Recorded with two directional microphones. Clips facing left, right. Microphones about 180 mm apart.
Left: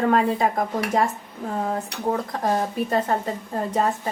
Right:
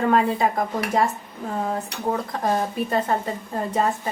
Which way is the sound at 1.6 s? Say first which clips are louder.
Left 1 dB; 40° left (ahead or behind).